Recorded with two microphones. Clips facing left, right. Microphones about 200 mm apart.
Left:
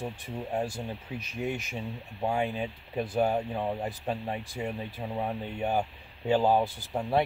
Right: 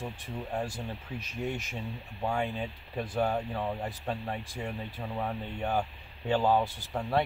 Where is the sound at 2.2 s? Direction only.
15° left (ahead or behind).